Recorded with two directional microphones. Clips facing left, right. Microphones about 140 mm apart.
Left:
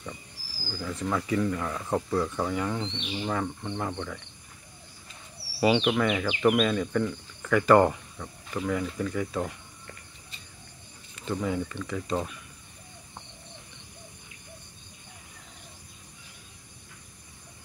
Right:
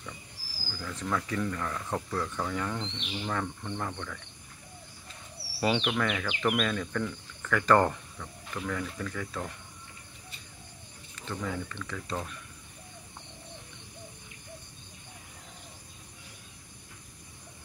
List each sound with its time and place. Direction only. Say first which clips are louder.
0.7 s speech: left 3 dB; 15° left (ahead or behind)
5.6 s speech: left 5 dB; 5° left (ahead or behind)
11.1 s speech: left 6 dB; 15° left (ahead or behind)